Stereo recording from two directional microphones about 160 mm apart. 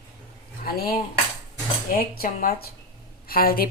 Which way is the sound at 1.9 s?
65° left (ahead or behind).